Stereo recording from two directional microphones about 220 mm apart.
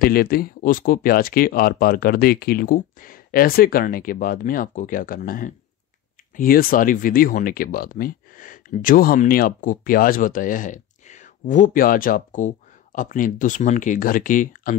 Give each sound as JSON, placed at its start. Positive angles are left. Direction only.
{"t": 0.0, "sound": "speech", "side_deg": 45}